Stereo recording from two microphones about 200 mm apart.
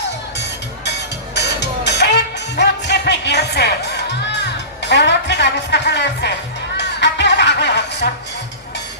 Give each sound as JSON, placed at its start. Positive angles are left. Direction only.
{"t": 1.4, "sound": "music", "side_deg": 60}